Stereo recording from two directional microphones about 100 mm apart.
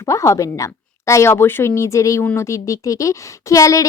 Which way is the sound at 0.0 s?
30° left (ahead or behind).